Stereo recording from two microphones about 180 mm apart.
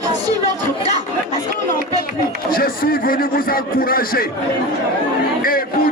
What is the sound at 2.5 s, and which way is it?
Speech, 55° left (ahead or behind).